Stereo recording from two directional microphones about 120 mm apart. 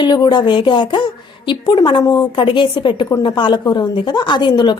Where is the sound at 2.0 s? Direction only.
30° left (ahead or behind).